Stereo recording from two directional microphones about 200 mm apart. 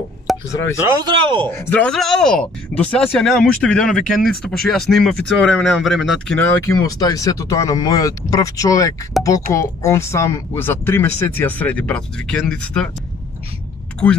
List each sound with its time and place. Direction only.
0.3 s a sound: centre (ahead or behind)
0.8 s a man's voice: 20° right (ahead or behind)
1.6 s speech: 5° left (ahead or behind)
6.6 s speech: 15° left (ahead or behind)